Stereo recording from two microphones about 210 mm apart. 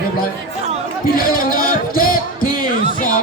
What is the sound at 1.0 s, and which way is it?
Music, 45° left (ahead or behind).